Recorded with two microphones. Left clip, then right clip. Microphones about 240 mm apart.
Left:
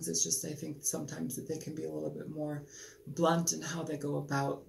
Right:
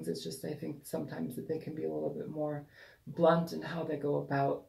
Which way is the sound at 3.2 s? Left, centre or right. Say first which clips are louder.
Right 2 dB; centre.